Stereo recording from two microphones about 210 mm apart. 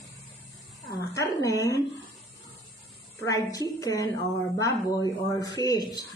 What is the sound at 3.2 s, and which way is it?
Speech, 15° left (ahead or behind).